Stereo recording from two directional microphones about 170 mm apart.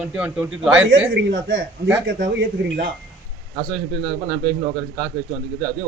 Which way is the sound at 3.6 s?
25° right (ahead or behind).